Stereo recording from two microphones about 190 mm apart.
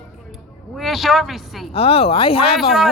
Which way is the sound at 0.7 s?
Centre (ahead or behind).